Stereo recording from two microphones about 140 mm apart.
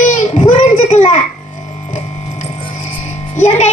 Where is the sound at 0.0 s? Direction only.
65° left (ahead or behind).